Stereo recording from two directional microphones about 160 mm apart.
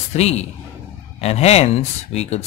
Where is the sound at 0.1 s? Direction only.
40° left (ahead or behind).